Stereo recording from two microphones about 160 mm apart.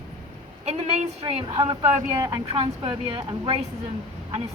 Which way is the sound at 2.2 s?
15° right (ahead or behind).